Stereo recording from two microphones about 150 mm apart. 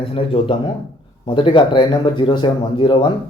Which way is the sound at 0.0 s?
35° left (ahead or behind).